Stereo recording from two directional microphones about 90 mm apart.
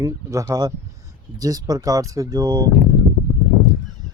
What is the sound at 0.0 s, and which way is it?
Speech, 35° right (ahead or behind).